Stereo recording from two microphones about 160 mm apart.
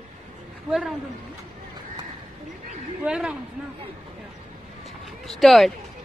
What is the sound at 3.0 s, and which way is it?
Speech, 5° right (ahead or behind).